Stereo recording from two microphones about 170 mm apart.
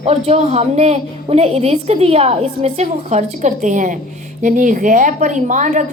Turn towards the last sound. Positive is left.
turn(degrees=-45)  # may be behind; listen again after turning